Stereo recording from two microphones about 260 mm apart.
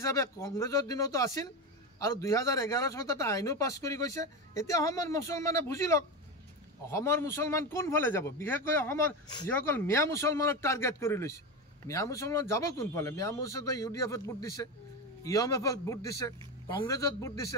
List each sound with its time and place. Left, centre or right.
0.0 s a man's voice: centre